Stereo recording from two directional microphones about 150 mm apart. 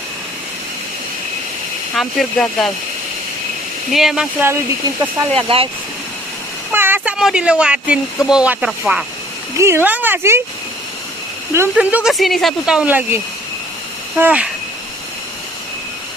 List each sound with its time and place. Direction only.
2.0 s speech: centre (ahead or behind)
3.9 s speech: centre (ahead or behind)
5.3 s speech: 35° right (ahead or behind)
6.7 s a sound: 15° right (ahead or behind)
7.2 s speech: 5° right (ahead or behind)
9.6 s speech: 15° right (ahead or behind)
11.5 s speech: 15° right (ahead or behind)
14.2 s speech: 10° right (ahead or behind)